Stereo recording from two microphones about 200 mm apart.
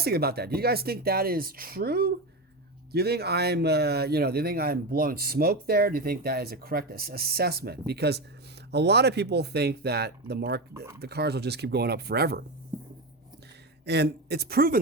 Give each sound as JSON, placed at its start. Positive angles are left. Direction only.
{"t": 0.0, "sound": "speech", "side_deg": -50}
{"t": 13.8, "sound": "speech", "side_deg": -55}